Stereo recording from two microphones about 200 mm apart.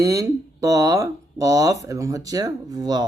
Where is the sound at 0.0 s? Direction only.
15° right (ahead or behind).